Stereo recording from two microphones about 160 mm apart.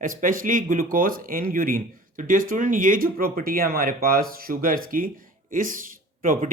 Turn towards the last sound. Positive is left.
turn(degrees=-55)  # may be behind; listen again after turning